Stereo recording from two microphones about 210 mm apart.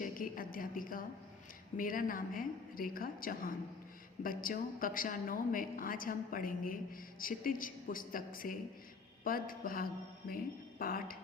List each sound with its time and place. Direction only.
0.0 s a woman's voice: 40° left (ahead or behind)
9.2 s mantra: 45° left (ahead or behind)
10.8 s speech: 45° left (ahead or behind)